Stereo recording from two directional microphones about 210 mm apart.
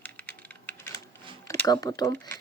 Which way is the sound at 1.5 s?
15° left (ahead or behind).